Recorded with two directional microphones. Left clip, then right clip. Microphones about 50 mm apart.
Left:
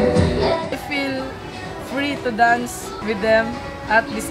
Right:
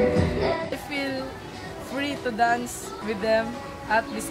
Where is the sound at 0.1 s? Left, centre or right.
Centre.